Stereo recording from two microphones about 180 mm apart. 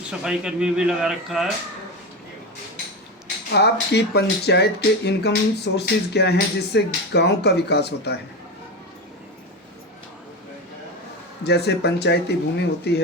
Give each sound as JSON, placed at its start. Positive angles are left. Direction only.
{"t": 0.1, "sound": "speech", "side_deg": -5}
{"t": 3.5, "sound": "speech", "side_deg": 65}
{"t": 11.4, "sound": "speech", "side_deg": 65}